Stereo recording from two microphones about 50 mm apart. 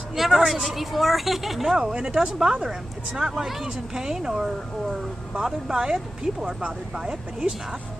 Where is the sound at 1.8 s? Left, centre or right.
Centre.